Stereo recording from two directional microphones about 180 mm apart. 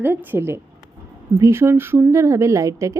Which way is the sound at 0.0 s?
10° right (ahead or behind).